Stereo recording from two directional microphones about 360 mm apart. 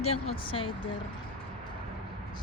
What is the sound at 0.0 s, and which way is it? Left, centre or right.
Speech, centre.